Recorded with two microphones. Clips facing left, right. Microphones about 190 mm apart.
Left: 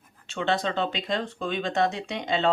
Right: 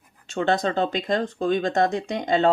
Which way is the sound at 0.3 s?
45° right (ahead or behind).